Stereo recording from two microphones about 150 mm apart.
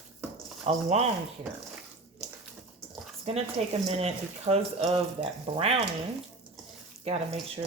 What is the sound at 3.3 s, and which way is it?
Speech, 45° right (ahead or behind).